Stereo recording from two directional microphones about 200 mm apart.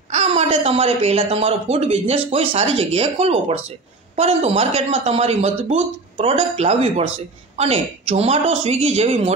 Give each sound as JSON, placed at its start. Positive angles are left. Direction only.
{"t": 0.1, "sound": "speech", "side_deg": -30}